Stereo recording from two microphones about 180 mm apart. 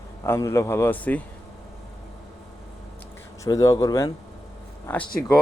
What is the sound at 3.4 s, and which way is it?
Speech, 20° left (ahead or behind).